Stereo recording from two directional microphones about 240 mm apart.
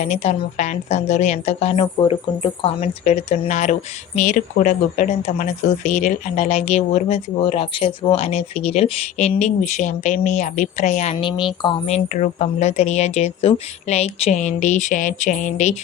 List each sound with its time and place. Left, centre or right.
0.0 s a woman's voice: left